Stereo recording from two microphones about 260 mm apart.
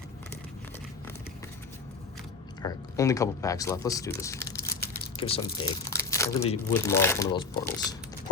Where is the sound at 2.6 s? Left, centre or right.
Centre.